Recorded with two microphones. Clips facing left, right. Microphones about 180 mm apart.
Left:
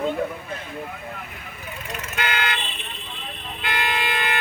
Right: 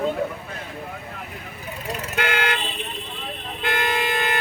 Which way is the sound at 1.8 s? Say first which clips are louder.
Right 5 dB; 35° right (ahead or behind).